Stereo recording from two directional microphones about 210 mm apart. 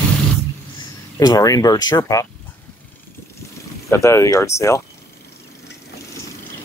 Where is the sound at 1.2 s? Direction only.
20° left (ahead or behind).